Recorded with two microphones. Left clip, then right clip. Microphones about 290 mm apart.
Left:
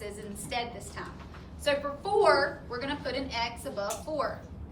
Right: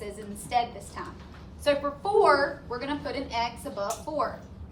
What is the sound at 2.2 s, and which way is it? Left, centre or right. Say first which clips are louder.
A woman's voice: right 1 dB; centre.